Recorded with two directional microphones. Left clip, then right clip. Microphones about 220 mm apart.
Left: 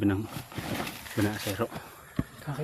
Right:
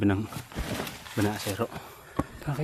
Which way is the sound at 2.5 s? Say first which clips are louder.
Right 3 dB; 40° right (ahead or behind).